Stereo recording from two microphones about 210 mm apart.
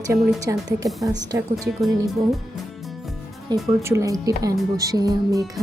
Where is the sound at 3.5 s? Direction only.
20° right (ahead or behind).